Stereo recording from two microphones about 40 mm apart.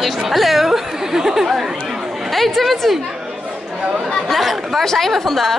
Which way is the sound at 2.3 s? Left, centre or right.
Centre.